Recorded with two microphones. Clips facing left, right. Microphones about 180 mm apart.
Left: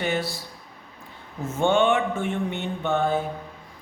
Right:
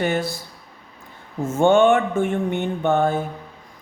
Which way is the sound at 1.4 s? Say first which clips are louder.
Right 6 dB; 50° right (ahead or behind).